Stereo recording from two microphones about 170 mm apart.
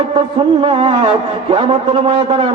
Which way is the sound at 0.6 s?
35° right (ahead or behind).